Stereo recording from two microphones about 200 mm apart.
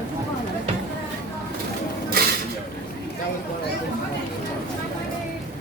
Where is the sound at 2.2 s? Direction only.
50° right (ahead or behind).